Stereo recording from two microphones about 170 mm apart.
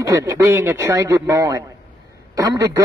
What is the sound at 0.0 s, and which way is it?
A man's voice, 20° right (ahead or behind).